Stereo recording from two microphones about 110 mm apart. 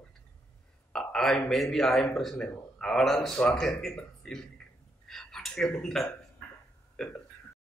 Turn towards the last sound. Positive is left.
turn(degrees=5)  # may be behind; listen again after turning